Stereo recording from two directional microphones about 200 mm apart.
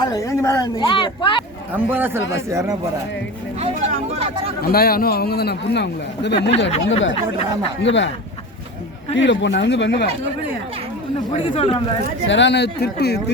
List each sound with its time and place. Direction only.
0.0 s a woman's voice: 15° left (ahead or behind)
1.9 s speech: 10° right (ahead or behind)
3.6 s a sound: 30° right (ahead or behind)
4.6 s a man's voice: 50° left (ahead or behind)
6.7 s speech: 30° left (ahead or behind)
7.8 s speech: 65° left (ahead or behind)
9.1 s speech: 65° left (ahead or behind)
11.3 s a woman's voice: 30° left (ahead or behind)
12.3 s speech: 60° left (ahead or behind)